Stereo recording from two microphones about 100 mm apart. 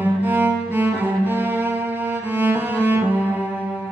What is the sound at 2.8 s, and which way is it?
Saxophone, 20° right (ahead or behind).